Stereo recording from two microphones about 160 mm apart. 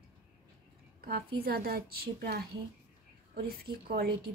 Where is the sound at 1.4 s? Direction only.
75° right (ahead or behind).